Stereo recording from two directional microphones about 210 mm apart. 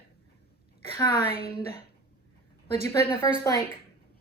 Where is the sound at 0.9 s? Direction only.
20° left (ahead or behind).